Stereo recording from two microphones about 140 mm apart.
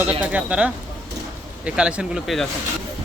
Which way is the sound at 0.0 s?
10° right (ahead or behind).